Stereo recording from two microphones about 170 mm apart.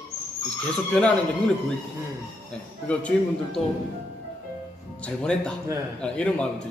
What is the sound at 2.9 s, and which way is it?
Speech, 5° left (ahead or behind).